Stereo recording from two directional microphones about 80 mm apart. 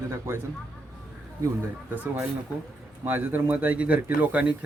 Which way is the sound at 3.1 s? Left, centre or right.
Right.